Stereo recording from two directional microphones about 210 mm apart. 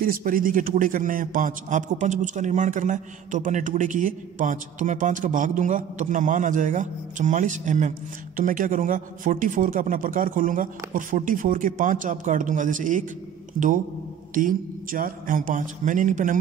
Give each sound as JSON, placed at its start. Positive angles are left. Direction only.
{"t": 0.0, "sound": "a man's voice", "side_deg": -40}